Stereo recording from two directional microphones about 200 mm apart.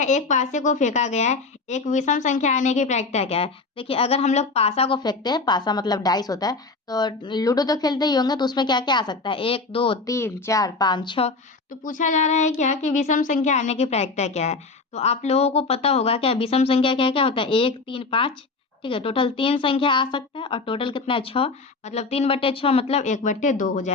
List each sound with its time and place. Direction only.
0.0 s a woman's voice: 35° left (ahead or behind)
10.1 s a woman's voice: 15° left (ahead or behind)
11.8 s a woman's voice: 40° left (ahead or behind)